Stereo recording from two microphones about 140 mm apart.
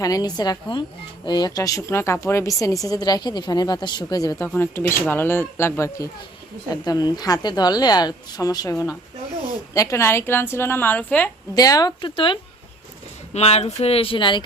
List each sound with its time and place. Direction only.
0.0 s speech: 25° left (ahead or behind)
4.4 s speech: 15° left (ahead or behind)
11.5 s speech: 25° left (ahead or behind)
13.3 s speech: 45° left (ahead or behind)